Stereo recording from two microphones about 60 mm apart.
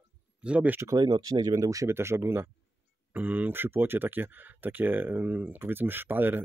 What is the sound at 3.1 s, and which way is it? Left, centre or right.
Speech, right.